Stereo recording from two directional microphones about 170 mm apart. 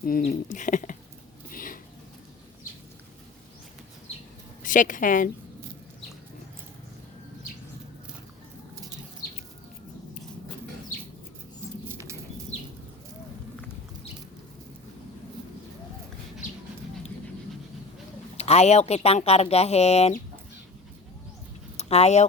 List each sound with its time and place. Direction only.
0.0 s speech: 60° left (ahead or behind)
1.5 s a sound: 55° left (ahead or behind)
4.6 s speech: 50° left (ahead or behind)
8.7 s bird flight: 20° right (ahead or behind)
11.9 s bird: 15° right (ahead or behind)
18.3 s speech: 40° left (ahead or behind)
21.8 s speech: 40° left (ahead or behind)